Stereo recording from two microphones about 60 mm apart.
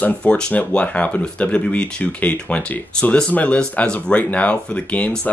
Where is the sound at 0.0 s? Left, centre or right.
Centre.